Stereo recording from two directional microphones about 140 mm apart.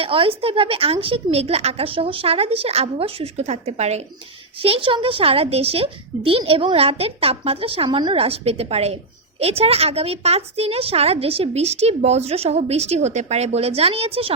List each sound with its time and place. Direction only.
0.0 s a woman's voice: 40° right (ahead or behind)